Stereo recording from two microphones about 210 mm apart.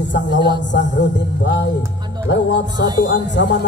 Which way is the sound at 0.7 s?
60° left (ahead or behind).